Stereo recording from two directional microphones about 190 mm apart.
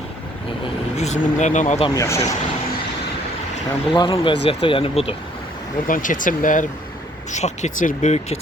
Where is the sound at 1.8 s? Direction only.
15° left (ahead or behind).